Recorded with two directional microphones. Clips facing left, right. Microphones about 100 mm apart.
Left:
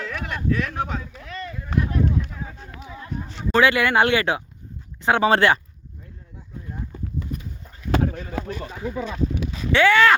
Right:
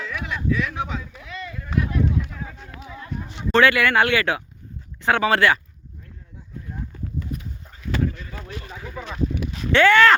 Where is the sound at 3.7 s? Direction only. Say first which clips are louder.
Left 1 dB; 20° left (ahead or behind).